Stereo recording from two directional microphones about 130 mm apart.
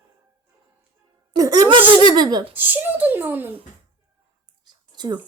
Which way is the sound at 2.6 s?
15° right (ahead or behind).